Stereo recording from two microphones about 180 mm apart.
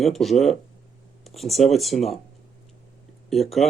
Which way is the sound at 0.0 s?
Centre (ahead or behind).